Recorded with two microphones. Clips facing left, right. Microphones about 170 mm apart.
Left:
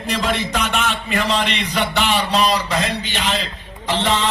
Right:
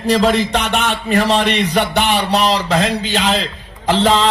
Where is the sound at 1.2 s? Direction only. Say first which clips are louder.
Right 6 dB; 55° right (ahead or behind); by 2.6 s 70° right (ahead or behind).